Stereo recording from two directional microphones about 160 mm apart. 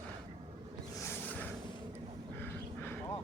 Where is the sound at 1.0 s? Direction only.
10° left (ahead or behind).